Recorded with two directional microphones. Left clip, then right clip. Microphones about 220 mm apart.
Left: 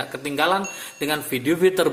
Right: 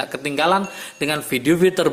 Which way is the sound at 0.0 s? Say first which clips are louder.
Right 2 dB; 25° right (ahead or behind).